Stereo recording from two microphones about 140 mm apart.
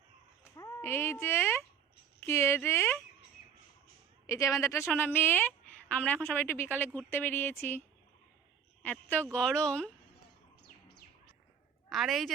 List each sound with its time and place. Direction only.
0.5 s speech: 20° left (ahead or behind)
4.3 s a woman's voice: 20° left (ahead or behind)
11.9 s a woman's voice: centre (ahead or behind)